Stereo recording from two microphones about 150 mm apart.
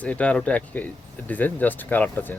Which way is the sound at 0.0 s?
10° left (ahead or behind).